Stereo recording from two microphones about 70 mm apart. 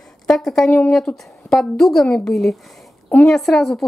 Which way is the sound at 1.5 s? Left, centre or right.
Centre.